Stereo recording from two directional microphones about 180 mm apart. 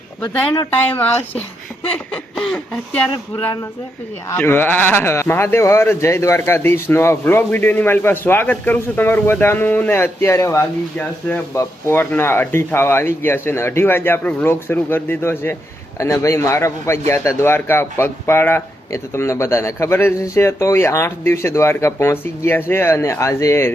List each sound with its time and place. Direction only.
0.9 s speech: 10° left (ahead or behind)
1.9 s snicker: 5° left (ahead or behind)
4.4 s speech: 10° left (ahead or behind)